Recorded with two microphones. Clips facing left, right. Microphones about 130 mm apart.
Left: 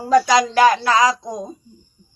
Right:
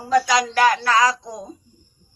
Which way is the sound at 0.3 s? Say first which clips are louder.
Left 4 dB; 25° left (ahead or behind).